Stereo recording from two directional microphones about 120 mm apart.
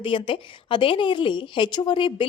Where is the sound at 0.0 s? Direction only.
45° left (ahead or behind).